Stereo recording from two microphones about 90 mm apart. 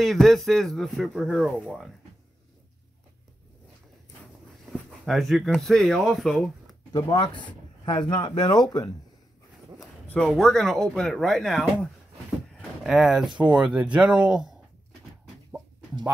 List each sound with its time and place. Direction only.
0.0 s speech: centre (ahead or behind)
4.6 s speech: centre (ahead or behind)
7.2 s speech: 60° left (ahead or behind)
10.0 s speech: 10° left (ahead or behind); by 14.5 s 10° right (ahead or behind)